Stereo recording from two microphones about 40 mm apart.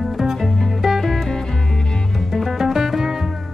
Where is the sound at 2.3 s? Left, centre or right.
Centre.